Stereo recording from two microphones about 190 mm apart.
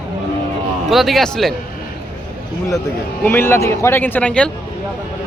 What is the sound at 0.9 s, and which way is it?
Speech, centre (ahead or behind).